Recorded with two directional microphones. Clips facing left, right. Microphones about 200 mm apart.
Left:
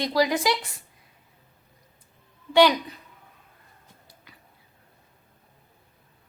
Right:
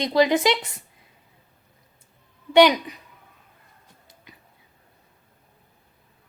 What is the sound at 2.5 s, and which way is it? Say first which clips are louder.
Speech: right 3 dB; 20° right (ahead or behind).